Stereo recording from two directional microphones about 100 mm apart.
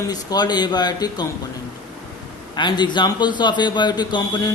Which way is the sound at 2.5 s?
45° left (ahead or behind).